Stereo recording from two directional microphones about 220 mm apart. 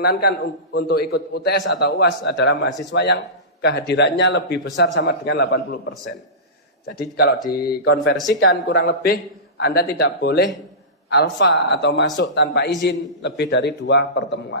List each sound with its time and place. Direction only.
0.0 s speech: 45° left (ahead or behind)